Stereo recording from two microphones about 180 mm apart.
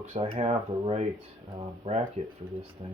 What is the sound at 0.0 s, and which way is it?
Speech, 35° right (ahead or behind).